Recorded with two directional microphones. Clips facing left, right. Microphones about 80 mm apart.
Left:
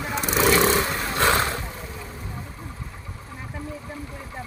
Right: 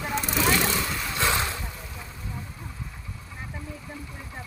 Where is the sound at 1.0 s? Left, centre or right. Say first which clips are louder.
Left 5 dB; left.